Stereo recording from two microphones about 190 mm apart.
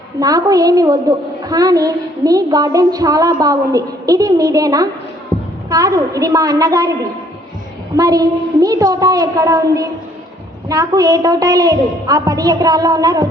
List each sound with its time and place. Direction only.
0.2 s a woman's voice: 20° right (ahead or behind)
5.3 s a sound: centre (ahead or behind)
5.7 s a woman's voice: 20° right (ahead or behind)
7.9 s a woman's voice: 20° right (ahead or behind)